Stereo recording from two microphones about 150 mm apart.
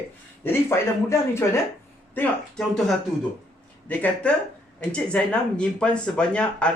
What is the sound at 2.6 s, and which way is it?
A man's voice, centre (ahead or behind).